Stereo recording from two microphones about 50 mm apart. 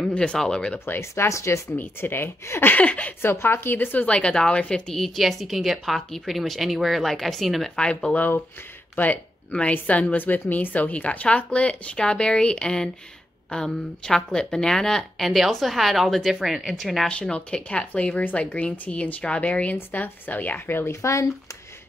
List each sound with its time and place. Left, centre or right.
0.1 s a woman's voice: centre
0.8 s speech: left
2.0 s a woman's voice: left
2.8 s a woman's voice: left
3.2 s a woman's voice: left
4.0 s a woman's voice: left
4.9 s a woman's voice: centre
7.7 s a woman's voice: centre
8.9 s a woman's voice: left; by 17.1 s centre
17.1 s a woman's voice: left
20.8 s speech: left